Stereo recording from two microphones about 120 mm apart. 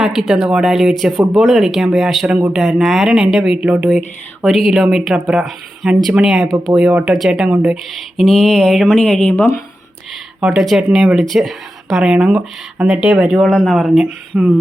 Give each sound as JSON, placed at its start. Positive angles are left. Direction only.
{"t": 0.0, "sound": "speech", "side_deg": -5}
{"t": 9.3, "sound": "speech", "side_deg": 20}
{"t": 10.4, "sound": "speech", "side_deg": -5}